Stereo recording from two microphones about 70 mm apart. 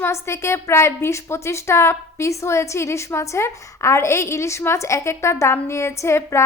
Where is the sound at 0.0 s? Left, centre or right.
Left.